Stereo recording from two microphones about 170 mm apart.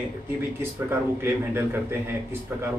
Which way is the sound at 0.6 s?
15° right (ahead or behind).